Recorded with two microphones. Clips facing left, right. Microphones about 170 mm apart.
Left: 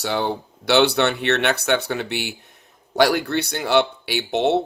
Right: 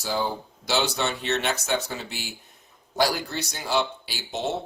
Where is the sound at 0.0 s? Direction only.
70° left (ahead or behind).